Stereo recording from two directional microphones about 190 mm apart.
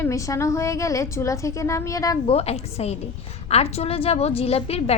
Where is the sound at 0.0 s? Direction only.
15° left (ahead or behind).